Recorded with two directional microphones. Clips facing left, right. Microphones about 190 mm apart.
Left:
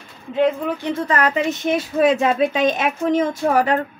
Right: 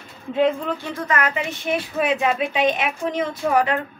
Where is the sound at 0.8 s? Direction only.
30° left (ahead or behind); by 3.7 s 45° left (ahead or behind).